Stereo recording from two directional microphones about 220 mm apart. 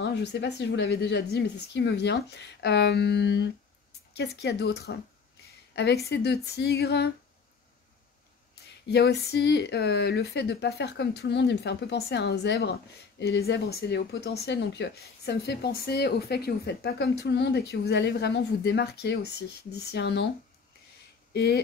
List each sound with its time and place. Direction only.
0.0 s speech: 50° left (ahead or behind)
6.0 s speech: 50° left (ahead or behind)
8.8 s speech: 50° left (ahead or behind)
21.3 s speech: 50° left (ahead or behind)